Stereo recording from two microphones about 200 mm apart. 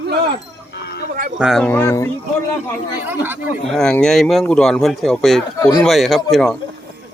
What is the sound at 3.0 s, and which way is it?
Speech, 10° right (ahead or behind).